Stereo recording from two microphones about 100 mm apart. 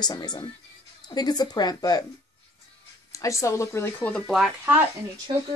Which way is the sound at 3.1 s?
30° left (ahead or behind).